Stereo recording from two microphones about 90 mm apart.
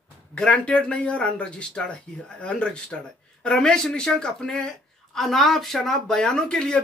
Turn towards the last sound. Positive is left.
turn(degrees=5)  # may be behind; listen again after turning